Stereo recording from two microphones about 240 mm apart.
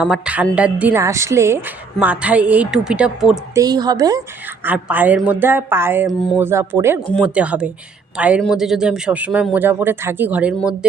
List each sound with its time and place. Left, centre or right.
0.0 s a woman's voice: centre
3.6 s a woman's voice: centre